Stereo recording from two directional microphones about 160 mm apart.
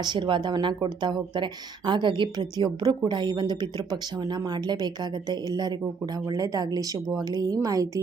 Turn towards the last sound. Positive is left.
turn(degrees=-20)  # may be behind; listen again after turning